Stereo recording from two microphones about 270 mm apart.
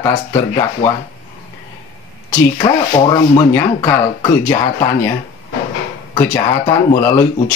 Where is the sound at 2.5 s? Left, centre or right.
Centre.